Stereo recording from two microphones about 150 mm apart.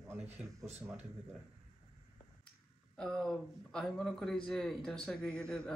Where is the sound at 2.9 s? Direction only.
5° left (ahead or behind).